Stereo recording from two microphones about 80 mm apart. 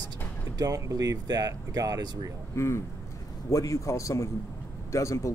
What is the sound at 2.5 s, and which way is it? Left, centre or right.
Speech, left.